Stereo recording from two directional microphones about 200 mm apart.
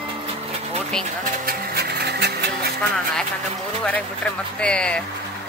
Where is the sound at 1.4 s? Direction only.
50° right (ahead or behind).